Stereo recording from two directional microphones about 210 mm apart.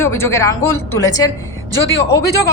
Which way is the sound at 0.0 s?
10° left (ahead or behind).